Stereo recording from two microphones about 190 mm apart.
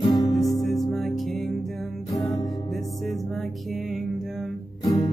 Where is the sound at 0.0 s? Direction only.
20° left (ahead or behind).